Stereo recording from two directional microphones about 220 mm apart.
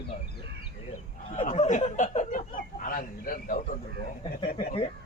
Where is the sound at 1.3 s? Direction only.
35° left (ahead or behind).